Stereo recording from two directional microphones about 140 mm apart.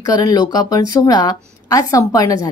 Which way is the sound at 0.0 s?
25° left (ahead or behind).